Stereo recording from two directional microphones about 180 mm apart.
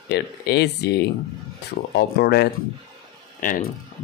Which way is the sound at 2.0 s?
65° left (ahead or behind).